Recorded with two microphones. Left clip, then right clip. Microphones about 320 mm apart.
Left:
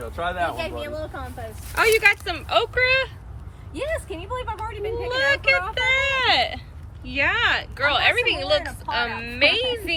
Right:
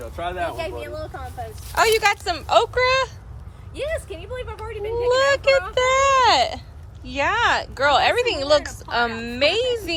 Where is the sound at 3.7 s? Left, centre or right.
Centre.